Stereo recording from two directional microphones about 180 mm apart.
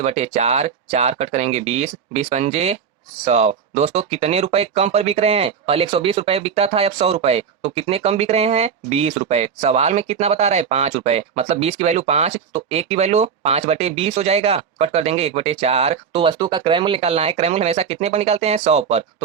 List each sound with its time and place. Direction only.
0.0 s speech: 35° right (ahead or behind)